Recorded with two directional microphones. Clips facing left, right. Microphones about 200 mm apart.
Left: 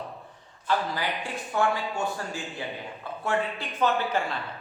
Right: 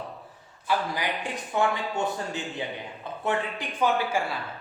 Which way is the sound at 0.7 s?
15° right (ahead or behind).